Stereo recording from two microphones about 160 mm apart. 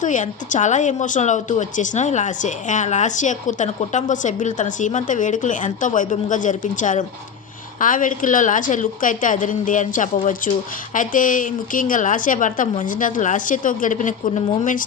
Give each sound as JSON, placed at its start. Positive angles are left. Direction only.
{"t": 0.0, "sound": "a woman's voice", "side_deg": 50}